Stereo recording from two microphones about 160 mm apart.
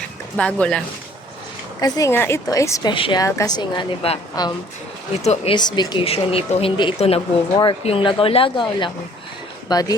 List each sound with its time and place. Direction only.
0.3 s speech: 5° left (ahead or behind)
1.8 s a woman's voice: 20° left (ahead or behind)
2.9 s a woman's voice: 30° left (ahead or behind)
5.2 s speech: 45° left (ahead or behind)
5.5 s speech: 25° left (ahead or behind)